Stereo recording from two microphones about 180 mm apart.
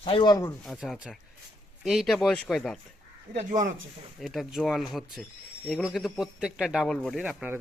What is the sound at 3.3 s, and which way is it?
Speech, 40° right (ahead or behind).